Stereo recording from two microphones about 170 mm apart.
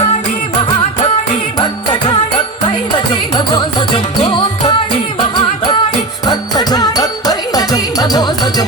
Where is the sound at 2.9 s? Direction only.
25° left (ahead or behind).